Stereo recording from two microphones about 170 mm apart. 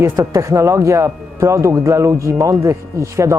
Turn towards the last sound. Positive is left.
turn(degrees=-15)  # may be behind; listen again after turning